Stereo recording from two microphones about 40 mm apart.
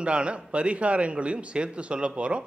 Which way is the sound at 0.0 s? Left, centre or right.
Right.